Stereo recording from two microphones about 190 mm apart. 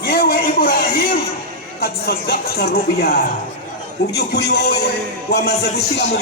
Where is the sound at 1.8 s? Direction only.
55° left (ahead or behind).